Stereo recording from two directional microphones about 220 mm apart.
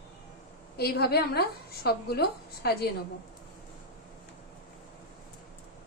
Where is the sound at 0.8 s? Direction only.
45° left (ahead or behind).